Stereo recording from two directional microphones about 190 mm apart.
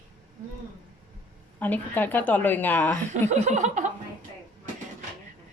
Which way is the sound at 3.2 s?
40° right (ahead or behind).